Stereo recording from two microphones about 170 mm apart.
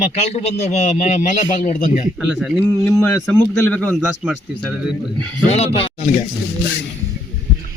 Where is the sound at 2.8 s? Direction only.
10° left (ahead or behind).